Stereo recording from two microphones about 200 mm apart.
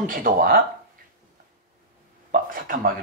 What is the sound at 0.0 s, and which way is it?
Speech, 45° right (ahead or behind).